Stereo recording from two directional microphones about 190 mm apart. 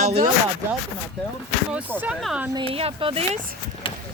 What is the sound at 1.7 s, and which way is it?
Speech, 10° right (ahead or behind).